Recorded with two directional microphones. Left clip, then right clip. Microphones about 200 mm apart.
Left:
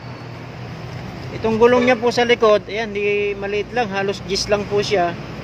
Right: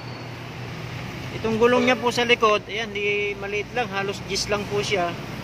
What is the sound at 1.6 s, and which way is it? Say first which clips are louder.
Speech: left 5 dB; 20° left (ahead or behind).